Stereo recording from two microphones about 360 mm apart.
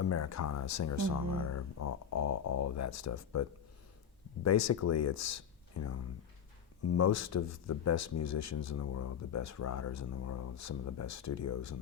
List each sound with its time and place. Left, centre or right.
0.0 s speech: left
4.4 s speech: left